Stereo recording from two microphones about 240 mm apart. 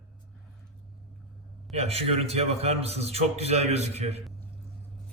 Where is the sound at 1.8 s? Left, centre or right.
Right.